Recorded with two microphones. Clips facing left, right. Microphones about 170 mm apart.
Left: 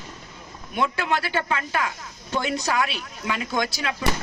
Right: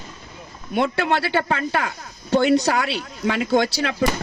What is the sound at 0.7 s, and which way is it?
Speech, 30° right (ahead or behind).